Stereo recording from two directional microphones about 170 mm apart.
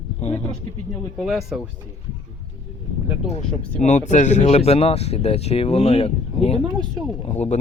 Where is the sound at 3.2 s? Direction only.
45° left (ahead or behind).